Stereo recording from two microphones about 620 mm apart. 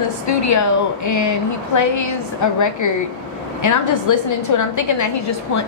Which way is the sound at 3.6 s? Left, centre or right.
Left.